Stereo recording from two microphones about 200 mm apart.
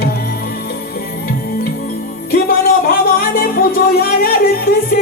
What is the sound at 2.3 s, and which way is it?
Music, 50° left (ahead or behind).